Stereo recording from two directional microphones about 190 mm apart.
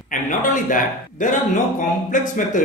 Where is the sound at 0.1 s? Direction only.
45° left (ahead or behind).